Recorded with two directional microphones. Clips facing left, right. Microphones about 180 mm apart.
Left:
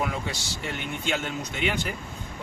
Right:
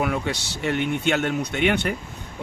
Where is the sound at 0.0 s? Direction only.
65° right (ahead or behind).